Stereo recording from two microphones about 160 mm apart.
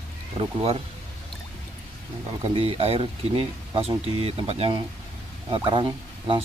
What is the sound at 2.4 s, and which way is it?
Speech, 35° right (ahead or behind).